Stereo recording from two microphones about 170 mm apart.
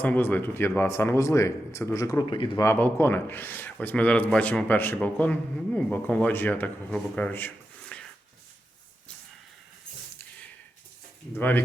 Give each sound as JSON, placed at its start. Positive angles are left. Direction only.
{"t": 0.0, "sound": "speech", "side_deg": 10}
{"t": 2.6, "sound": "speech", "side_deg": 10}
{"t": 11.3, "sound": "speech", "side_deg": 10}